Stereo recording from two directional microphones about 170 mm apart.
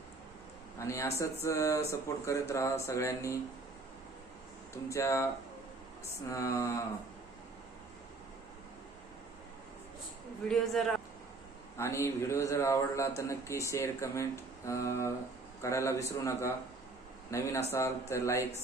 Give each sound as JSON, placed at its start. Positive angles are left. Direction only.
{"t": 0.8, "sound": "speech", "side_deg": 15}
{"t": 4.9, "sound": "speech", "side_deg": 15}
{"t": 6.3, "sound": "speech", "side_deg": 20}
{"t": 10.5, "sound": "a man's voice", "side_deg": 0}
{"t": 11.8, "sound": "speech", "side_deg": 15}